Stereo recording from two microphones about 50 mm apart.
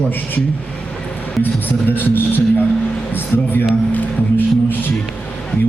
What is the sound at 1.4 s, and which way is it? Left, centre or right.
A man's voice, left.